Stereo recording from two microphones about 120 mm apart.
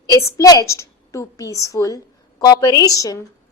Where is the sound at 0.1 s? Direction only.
30° left (ahead or behind).